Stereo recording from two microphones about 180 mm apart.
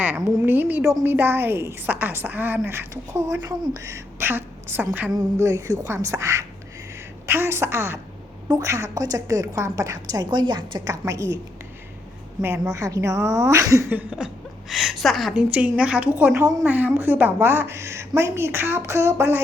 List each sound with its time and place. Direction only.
0.0 s a woman's voice: 10° right (ahead or behind)
12.4 s a woman's voice: 10° right (ahead or behind)